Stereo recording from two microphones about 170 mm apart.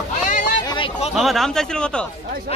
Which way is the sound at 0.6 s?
30° left (ahead or behind).